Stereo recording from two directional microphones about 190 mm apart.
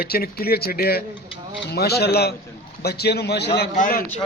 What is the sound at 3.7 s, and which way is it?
Speech, 45° left (ahead or behind).